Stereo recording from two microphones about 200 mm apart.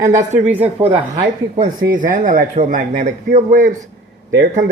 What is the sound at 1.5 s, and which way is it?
Speech, 45° right (ahead or behind).